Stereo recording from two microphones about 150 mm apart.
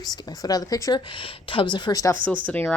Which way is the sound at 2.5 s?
10° left (ahead or behind).